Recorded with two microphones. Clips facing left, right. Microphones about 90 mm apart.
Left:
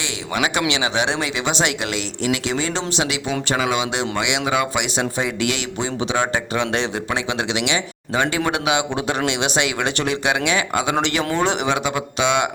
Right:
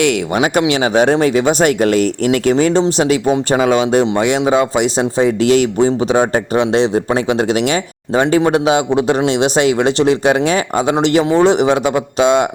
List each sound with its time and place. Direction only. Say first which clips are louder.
0.3 s speech: right 3 dB; 40° right (ahead or behind)